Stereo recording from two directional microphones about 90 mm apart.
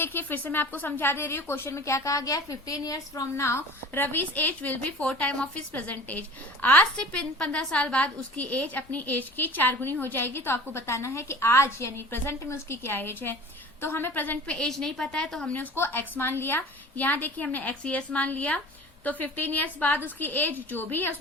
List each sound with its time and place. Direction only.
0.0 s a woman's voice: 20° left (ahead or behind)
14.7 s a woman's voice: 5° left (ahead or behind)
15.5 s a woman's voice: 20° left (ahead or behind)